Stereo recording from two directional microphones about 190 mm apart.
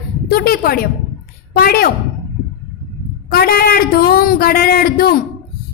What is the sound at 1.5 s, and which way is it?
Speech, 50° left (ahead or behind).